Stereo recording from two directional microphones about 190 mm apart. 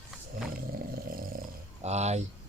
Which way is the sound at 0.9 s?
50° right (ahead or behind).